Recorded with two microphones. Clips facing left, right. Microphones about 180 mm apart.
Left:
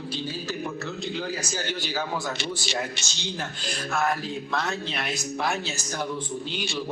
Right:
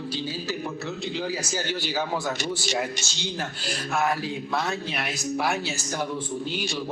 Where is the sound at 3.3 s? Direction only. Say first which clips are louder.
Right 1 dB; 10° right (ahead or behind).